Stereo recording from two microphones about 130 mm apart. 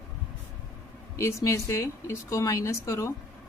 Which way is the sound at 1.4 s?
20° left (ahead or behind).